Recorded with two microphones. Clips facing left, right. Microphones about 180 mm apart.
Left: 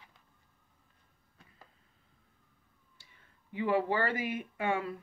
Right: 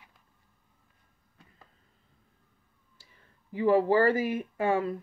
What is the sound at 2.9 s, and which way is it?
Speech, 35° right (ahead or behind).